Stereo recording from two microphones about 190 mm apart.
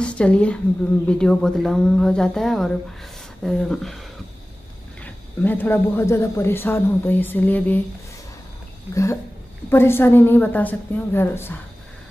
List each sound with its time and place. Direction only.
0.0 s a woman's voice: 5° left (ahead or behind)
5.0 s speech: 10° left (ahead or behind)
8.9 s speech: 15° left (ahead or behind)